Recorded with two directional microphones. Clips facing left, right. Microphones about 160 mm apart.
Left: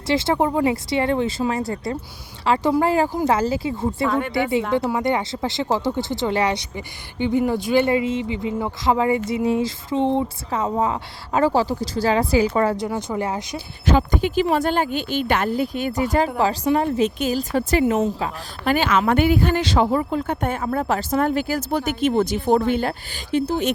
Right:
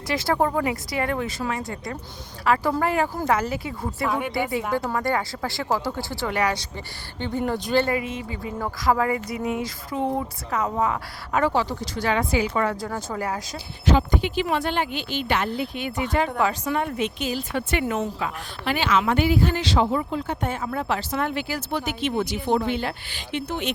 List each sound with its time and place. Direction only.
0.1 s speech: 25° left (ahead or behind)
2.4 s a sound: 25° left (ahead or behind)
2.8 s speech: 30° left (ahead or behind)
4.1 s speech: 10° right (ahead or behind)
4.7 s speech: 15° left (ahead or behind)
6.7 s speech: 15° left (ahead or behind)
7.9 s speech: 25° left (ahead or behind)
12.7 s speech: 20° left (ahead or behind)
13.8 s speech: 50° left (ahead or behind); by 17.1 s 30° left (ahead or behind)
17.2 s speech: 45° left (ahead or behind); by 18.3 s 30° left (ahead or behind)
18.6 s speech: 45° left (ahead or behind)